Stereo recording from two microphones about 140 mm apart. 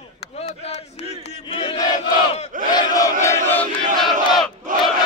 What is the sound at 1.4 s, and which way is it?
Battle cry, 40° left (ahead or behind).